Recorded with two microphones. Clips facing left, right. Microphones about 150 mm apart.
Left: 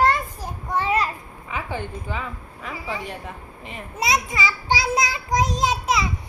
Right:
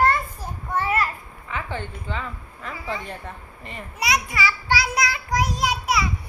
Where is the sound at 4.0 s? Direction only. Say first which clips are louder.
Left 1 dB; 25° left (ahead or behind).